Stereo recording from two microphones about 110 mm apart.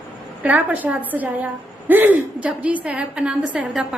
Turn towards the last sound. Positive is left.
turn(degrees=-10)  # may be behind; listen again after turning